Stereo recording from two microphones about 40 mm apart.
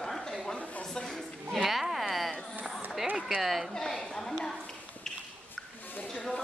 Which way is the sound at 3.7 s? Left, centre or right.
Centre.